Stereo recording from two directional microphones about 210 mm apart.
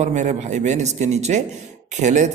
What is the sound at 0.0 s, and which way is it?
Speech, 35° right (ahead or behind).